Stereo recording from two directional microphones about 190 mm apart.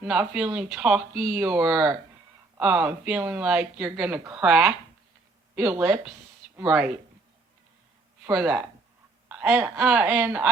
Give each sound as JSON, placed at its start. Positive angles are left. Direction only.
{"t": 0.0, "sound": "speech", "side_deg": -5}
{"t": 8.3, "sound": "speech", "side_deg": -5}